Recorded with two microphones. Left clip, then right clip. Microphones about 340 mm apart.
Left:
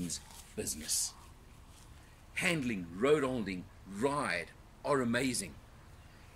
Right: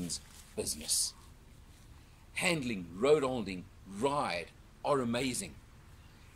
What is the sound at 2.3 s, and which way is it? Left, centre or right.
Speech, centre.